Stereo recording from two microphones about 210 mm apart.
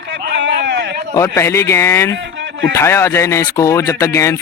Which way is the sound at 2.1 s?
65° right (ahead or behind).